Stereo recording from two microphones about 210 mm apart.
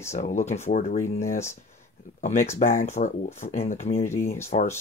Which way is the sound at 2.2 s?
35° left (ahead or behind).